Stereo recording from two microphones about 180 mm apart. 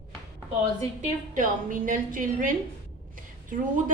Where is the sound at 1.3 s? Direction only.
50° right (ahead or behind).